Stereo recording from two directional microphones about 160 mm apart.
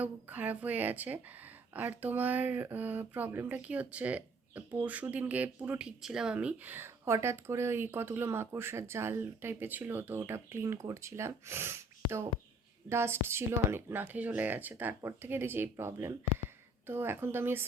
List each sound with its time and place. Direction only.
0.0 s speech: 10° right (ahead or behind)